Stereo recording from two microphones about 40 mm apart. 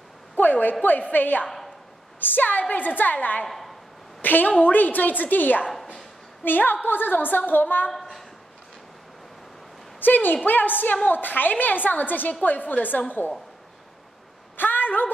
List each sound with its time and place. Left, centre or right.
0.4 s a woman's voice: left
3.4 s a sound: centre
4.2 s a woman's voice: left
7.9 s a woman's voice: centre
9.9 s a woman's voice: left
14.6 s a sound: left